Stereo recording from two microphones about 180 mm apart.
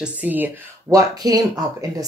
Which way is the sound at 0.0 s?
10° right (ahead or behind).